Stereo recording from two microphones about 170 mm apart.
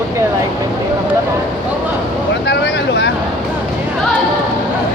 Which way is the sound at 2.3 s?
90° left.